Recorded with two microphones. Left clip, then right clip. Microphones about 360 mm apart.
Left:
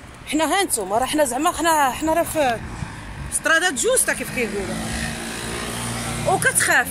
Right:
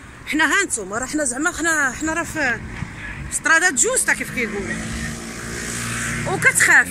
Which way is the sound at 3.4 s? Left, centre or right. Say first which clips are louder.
Right 2 dB; centre.